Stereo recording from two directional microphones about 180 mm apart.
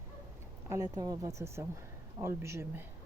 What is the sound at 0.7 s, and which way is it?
Speech, 20° right (ahead or behind).